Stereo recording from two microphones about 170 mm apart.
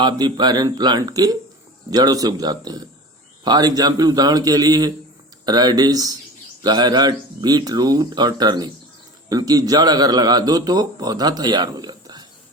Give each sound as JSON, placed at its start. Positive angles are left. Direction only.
{"t": 0.0, "sound": "a man's voice", "side_deg": -25}